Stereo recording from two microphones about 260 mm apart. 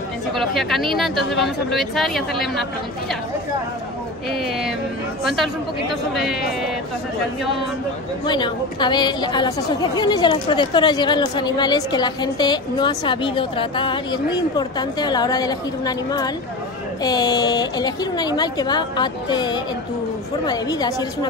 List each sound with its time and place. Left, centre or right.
0.4 s speech: centre
4.3 s speech: centre
8.3 s a woman's voice: centre